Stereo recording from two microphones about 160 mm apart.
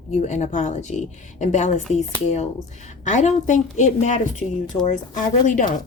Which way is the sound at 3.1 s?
50° left (ahead or behind).